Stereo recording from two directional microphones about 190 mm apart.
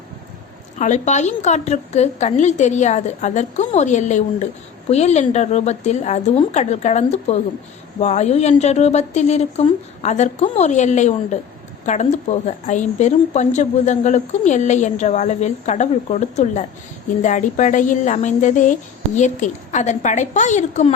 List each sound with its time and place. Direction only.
0.8 s a woman's voice: 40° left (ahead or behind)